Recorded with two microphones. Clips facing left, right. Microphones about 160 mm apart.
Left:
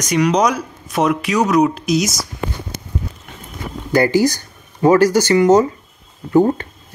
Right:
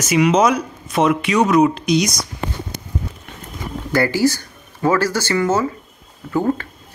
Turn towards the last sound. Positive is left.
turn(degrees=20)  # may be behind; listen again after turning